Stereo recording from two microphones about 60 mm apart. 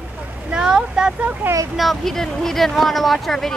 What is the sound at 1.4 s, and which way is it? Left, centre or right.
Speech, right.